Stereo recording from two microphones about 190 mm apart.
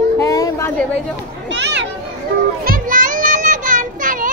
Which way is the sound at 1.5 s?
70° right (ahead or behind).